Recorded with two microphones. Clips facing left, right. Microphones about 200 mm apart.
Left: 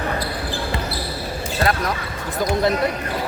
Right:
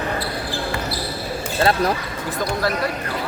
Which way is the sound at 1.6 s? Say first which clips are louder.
Right 3 dB; 30° right (ahead or behind).